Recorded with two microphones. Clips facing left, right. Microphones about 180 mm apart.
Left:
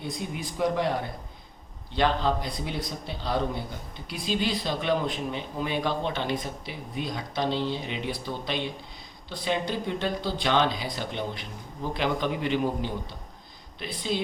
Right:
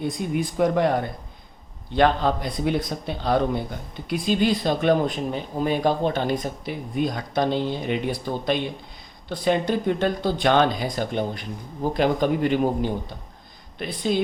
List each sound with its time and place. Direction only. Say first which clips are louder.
0.0 s speech: right 8 dB; 55° right (ahead or behind)
2.0 s a man's voice: right 5 dB; 55° right (ahead or behind)